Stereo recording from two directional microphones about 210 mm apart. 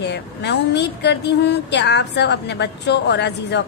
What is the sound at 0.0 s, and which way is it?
A woman's voice, 55° left (ahead or behind).